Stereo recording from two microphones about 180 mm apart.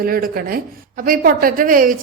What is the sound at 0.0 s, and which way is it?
A woman's voice, 55° right (ahead or behind).